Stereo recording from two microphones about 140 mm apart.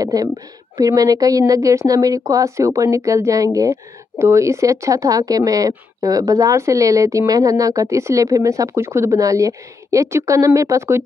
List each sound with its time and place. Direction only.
0.0 s a woman's voice: 25° right (ahead or behind)